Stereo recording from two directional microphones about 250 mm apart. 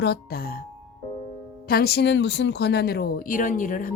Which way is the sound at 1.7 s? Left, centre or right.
Left.